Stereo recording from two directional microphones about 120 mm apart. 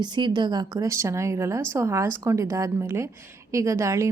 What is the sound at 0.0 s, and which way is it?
Speech, 40° right (ahead or behind).